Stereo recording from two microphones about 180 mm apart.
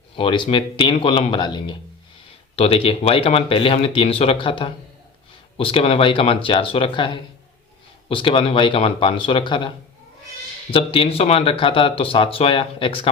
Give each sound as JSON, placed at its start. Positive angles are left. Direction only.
{"t": 0.2, "sound": "speech", "side_deg": 25}